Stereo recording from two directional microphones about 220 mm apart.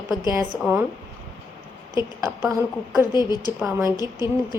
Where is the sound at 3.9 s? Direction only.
15° left (ahead or behind).